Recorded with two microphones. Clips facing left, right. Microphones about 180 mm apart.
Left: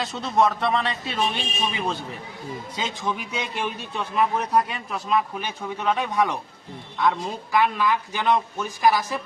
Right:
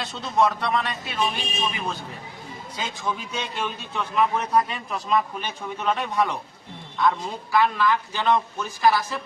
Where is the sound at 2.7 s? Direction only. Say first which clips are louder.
Even; 20° left (ahead or behind).